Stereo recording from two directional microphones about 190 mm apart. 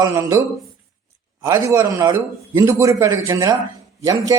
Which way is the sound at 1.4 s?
15° right (ahead or behind).